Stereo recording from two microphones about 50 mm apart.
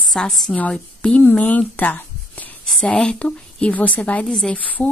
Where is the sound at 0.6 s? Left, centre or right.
Left.